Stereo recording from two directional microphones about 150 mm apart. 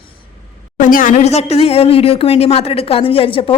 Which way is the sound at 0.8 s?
65° left (ahead or behind).